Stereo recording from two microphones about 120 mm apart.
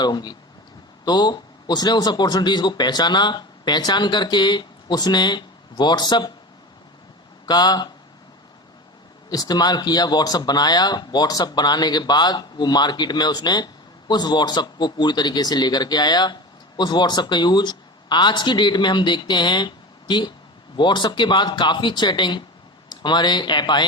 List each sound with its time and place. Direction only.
0.0 s speech: 35° left (ahead or behind)
7.4 s speech: 35° left (ahead or behind)
9.3 s speech: 35° left (ahead or behind)